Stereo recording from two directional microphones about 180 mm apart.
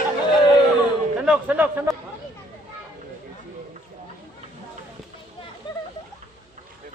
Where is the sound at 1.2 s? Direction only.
5° right (ahead or behind).